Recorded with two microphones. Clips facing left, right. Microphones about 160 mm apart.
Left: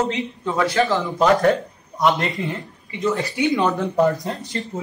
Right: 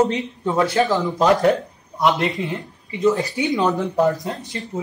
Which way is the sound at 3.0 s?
15° right (ahead or behind).